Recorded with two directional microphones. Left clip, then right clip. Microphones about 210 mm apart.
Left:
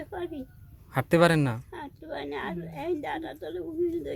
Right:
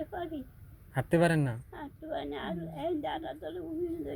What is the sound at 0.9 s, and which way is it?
Speech, 25° left (ahead or behind).